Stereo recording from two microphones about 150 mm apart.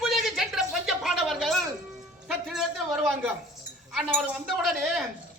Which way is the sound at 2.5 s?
5° right (ahead or behind).